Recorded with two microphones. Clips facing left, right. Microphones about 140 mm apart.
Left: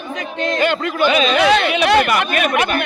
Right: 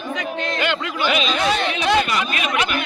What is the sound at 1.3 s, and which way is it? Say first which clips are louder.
Chatter: left 6 dB; 90° left.